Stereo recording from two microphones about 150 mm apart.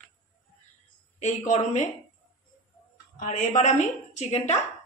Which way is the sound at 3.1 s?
60° left (ahead or behind).